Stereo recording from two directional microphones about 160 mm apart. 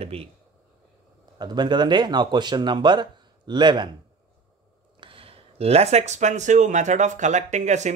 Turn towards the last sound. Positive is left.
turn(degrees=-45)  # may be behind; listen again after turning